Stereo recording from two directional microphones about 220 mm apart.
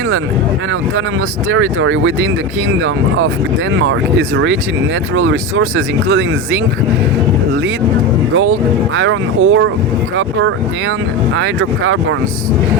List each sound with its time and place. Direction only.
1.5 s speech: 65° right (ahead or behind)
5.1 s speech: 60° right (ahead or behind)
8.3 s speech: 65° right (ahead or behind)
11.3 s speech: 60° right (ahead or behind)